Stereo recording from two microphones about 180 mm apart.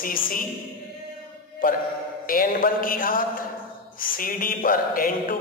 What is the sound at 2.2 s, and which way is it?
Speech, 50° left (ahead or behind).